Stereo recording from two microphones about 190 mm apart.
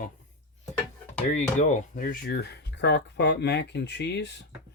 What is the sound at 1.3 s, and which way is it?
Speech, 40° left (ahead or behind).